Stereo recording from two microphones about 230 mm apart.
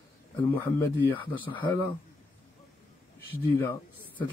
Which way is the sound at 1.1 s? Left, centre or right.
Centre.